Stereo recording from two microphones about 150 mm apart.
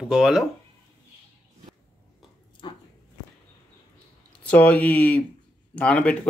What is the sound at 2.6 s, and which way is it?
Dog, 35° left (ahead or behind).